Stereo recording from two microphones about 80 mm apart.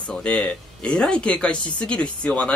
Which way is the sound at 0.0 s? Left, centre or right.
Centre.